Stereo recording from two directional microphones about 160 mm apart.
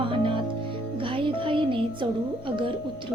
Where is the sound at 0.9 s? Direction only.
30° right (ahead or behind).